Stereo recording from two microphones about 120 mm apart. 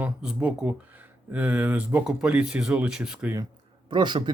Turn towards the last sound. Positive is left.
turn(degrees=-40)  # may be behind; listen again after turning